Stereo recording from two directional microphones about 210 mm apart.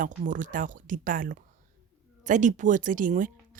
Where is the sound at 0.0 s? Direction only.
40° right (ahead or behind).